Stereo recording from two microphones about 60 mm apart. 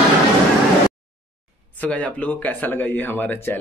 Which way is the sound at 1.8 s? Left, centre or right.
Left.